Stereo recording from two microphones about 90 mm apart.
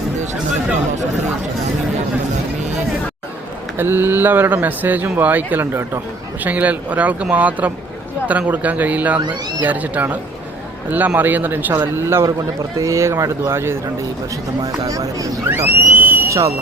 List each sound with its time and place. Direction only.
3.8 s speech: 25° right (ahead or behind)
9.2 s speech: 50° right (ahead or behind)
9.6 s speech: 15° right (ahead or behind)
14.6 s speech: 40° right (ahead or behind)
15.4 s speech: 30° right (ahead or behind)